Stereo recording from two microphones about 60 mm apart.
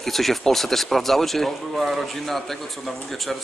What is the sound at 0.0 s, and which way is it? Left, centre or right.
Speech, centre.